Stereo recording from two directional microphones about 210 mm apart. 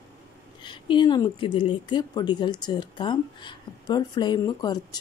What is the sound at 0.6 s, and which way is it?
Speech, 20° left (ahead or behind).